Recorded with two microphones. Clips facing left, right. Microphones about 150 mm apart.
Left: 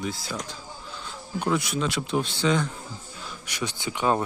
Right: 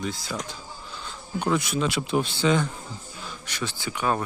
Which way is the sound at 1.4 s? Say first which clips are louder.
Right 1 dB; centre (ahead or behind).